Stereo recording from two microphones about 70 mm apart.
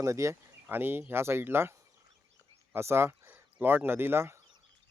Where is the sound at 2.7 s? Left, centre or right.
Right.